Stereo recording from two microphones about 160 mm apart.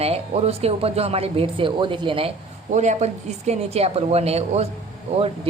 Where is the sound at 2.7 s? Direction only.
45° right (ahead or behind).